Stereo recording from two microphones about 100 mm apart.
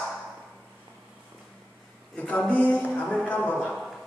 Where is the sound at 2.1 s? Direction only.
15° left (ahead or behind).